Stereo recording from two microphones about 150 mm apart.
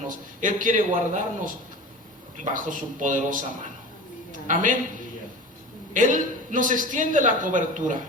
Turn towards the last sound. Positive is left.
turn(degrees=-60)  # may be behind; listen again after turning